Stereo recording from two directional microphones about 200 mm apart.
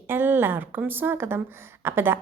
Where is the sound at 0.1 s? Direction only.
10° right (ahead or behind).